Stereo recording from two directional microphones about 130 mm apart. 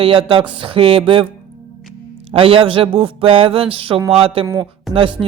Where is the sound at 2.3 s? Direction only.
45° right (ahead or behind).